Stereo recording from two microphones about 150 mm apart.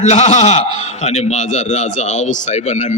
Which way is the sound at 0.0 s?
50° left (ahead or behind).